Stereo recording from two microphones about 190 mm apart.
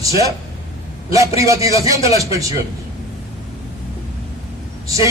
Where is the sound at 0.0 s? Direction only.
15° right (ahead or behind).